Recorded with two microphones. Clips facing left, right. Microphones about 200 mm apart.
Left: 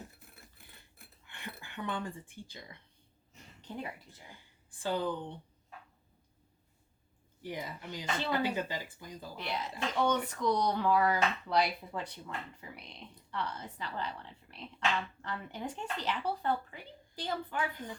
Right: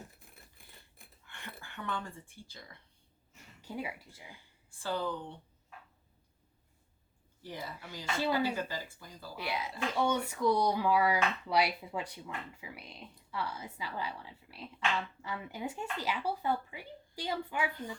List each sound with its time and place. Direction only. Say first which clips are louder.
1.3 s speech: left 2 dB; 15° left (ahead or behind)
3.6 s speech: right 2 dB; 10° right (ahead or behind)
4.8 s a woman's voice: left 2 dB; 15° left (ahead or behind)
7.4 s a woman's voice: left 3 dB; 15° left (ahead or behind)
8.0 s speech: right 2 dB; 10° right (ahead or behind)
8.5 s speech: left 1 dB; 20° left (ahead or behind)
9.3 s speech: right 1 dB; 10° right (ahead or behind)